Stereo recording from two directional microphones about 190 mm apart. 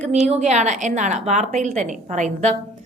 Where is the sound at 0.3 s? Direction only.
35° right (ahead or behind).